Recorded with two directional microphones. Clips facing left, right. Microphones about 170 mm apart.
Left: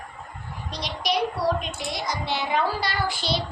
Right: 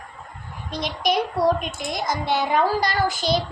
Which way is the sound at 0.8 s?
50° right (ahead or behind).